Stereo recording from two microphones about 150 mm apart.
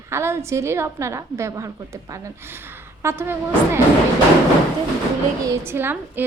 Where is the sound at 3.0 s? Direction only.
15° right (ahead or behind).